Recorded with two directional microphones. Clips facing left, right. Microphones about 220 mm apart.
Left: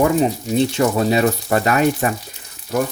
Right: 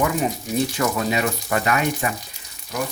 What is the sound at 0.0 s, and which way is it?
Speech, 30° left (ahead or behind).